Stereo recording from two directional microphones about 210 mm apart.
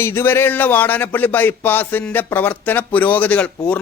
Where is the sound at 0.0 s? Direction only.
10° left (ahead or behind).